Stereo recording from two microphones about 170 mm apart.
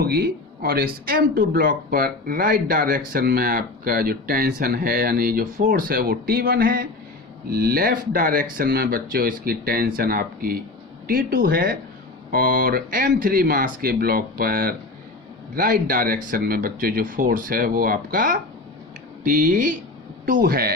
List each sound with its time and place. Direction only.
0.0 s speech: 65° right (ahead or behind)